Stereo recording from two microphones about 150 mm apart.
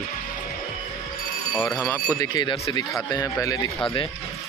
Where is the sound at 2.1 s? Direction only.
25° left (ahead or behind).